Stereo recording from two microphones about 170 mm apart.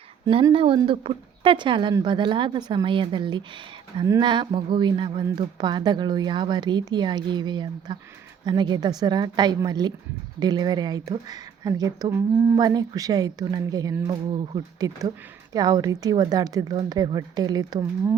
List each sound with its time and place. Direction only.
0.5 s speech: 30° right (ahead or behind)